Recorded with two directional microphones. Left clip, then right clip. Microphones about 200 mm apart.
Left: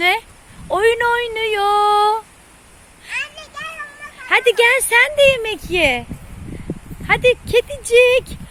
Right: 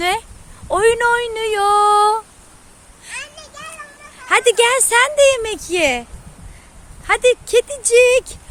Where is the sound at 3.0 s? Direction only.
10° right (ahead or behind).